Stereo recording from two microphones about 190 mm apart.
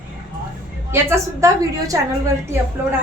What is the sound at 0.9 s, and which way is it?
A woman's voice, 10° right (ahead or behind).